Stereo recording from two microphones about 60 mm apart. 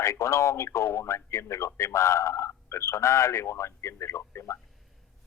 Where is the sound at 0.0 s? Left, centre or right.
Left.